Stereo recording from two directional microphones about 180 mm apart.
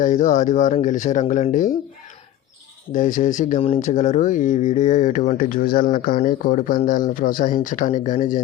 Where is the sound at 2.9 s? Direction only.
45° left (ahead or behind).